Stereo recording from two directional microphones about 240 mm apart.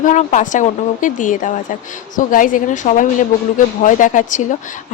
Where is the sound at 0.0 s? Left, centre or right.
Left.